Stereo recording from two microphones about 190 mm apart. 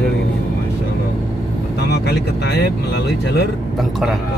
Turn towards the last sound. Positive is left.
turn(degrees=0)  # may be behind; listen again after turning